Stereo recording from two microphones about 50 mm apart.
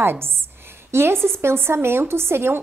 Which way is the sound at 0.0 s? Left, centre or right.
Right.